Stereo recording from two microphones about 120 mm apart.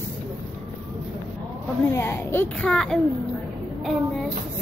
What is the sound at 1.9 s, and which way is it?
Speech, 20° left (ahead or behind).